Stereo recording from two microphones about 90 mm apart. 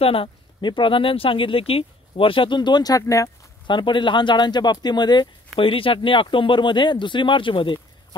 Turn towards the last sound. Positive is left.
turn(degrees=70)  # may be behind; listen again after turning